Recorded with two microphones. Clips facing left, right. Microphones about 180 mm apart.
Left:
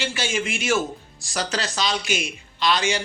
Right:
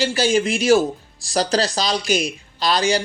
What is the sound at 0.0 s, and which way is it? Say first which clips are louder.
Speech: right 8 dB; 35° right (ahead or behind).